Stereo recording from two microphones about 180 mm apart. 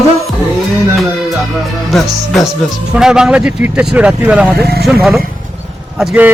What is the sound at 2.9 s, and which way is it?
Speech, 5° right (ahead or behind).